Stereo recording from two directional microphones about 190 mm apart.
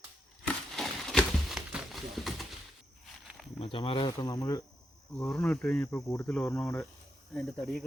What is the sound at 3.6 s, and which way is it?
Speech, 30° left (ahead or behind).